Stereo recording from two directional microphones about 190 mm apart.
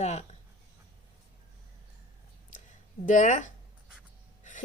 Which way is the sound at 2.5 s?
40° left (ahead or behind).